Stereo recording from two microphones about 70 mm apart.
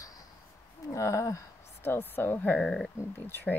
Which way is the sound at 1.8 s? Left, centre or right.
Left.